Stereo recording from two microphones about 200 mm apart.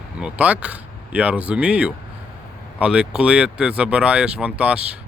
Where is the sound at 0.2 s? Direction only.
5° right (ahead or behind).